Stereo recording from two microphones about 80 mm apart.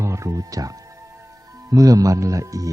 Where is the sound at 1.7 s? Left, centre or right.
Right.